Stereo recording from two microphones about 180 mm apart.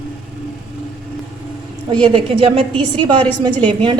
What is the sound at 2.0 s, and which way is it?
A woman's voice, 30° right (ahead or behind).